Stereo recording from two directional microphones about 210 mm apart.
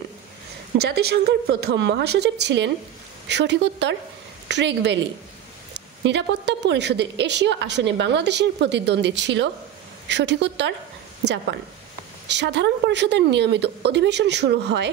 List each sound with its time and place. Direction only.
0.7 s a woman's voice: 50° right (ahead or behind)
12.3 s a woman's voice: 55° right (ahead or behind)